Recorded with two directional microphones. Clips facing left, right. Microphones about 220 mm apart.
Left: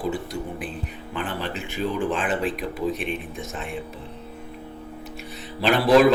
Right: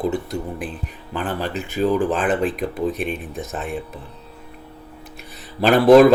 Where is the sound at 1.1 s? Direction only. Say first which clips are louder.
Right 5 dB; 40° right (ahead or behind).